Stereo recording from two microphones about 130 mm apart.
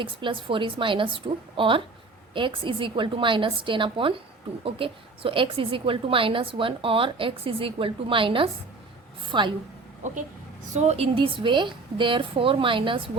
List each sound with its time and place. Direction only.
0.0 s a woman's voice: 40° right (ahead or behind)
10.8 s a woman's voice: 55° right (ahead or behind)